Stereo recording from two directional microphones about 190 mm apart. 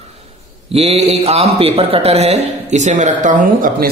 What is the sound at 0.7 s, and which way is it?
A man's voice, 30° right (ahead or behind).